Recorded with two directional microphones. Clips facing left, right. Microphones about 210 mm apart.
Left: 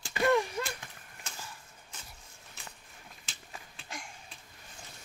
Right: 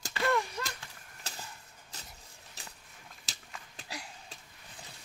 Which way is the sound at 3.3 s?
40° right (ahead or behind).